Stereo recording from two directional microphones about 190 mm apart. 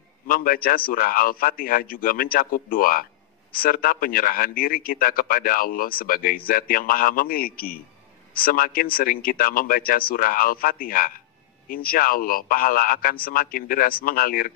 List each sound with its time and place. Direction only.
0.3 s a man's voice: 50° left (ahead or behind)